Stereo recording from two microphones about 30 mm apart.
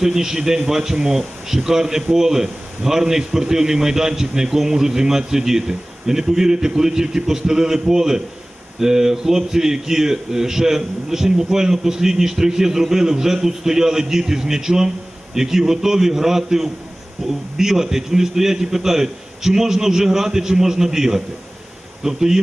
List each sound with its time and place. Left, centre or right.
0.0 s a man's voice: centre